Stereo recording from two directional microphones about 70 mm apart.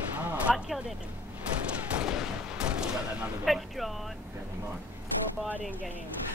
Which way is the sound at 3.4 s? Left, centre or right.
Centre.